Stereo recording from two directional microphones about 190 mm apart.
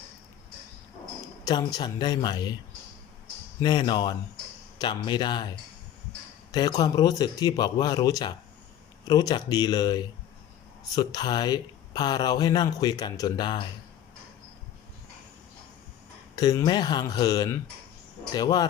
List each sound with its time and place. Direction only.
1.5 s speech: 20° left (ahead or behind)
3.6 s speech: 25° left (ahead or behind)
6.5 s speech: 20° left (ahead or behind)
16.3 s speech: 20° left (ahead or behind)